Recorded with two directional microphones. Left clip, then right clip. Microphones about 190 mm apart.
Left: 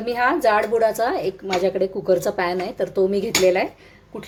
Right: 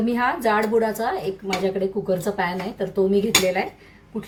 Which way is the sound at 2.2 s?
45° left (ahead or behind).